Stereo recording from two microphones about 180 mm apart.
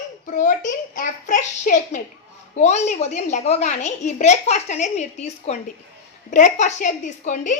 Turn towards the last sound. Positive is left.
turn(degrees=45)  # may be behind; listen again after turning